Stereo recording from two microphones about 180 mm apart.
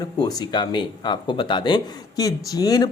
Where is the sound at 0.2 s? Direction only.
20° left (ahead or behind).